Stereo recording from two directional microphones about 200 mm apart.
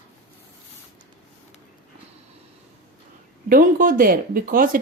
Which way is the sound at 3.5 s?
45° right (ahead or behind).